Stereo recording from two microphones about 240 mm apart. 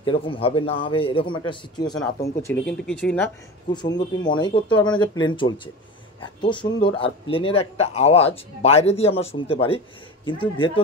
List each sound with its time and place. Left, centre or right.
0.0 s speech: left; by 3.3 s centre
4.2 s speech: centre